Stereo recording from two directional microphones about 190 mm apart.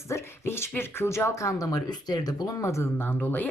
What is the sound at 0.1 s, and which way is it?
Speech, 15° left (ahead or behind).